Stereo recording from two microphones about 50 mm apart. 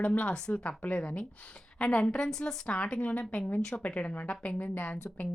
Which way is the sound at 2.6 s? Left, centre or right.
Left.